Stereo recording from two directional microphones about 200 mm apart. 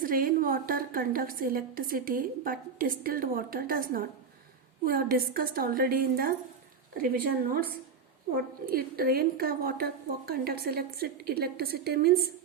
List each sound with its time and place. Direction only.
0.0 s a woman's voice: 45° right (ahead or behind)
8.6 s a woman's voice: 50° right (ahead or behind)